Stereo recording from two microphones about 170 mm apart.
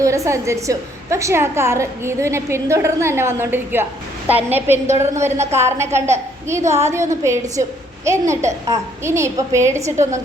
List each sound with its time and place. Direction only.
0.0 s a woman's voice: 20° right (ahead or behind)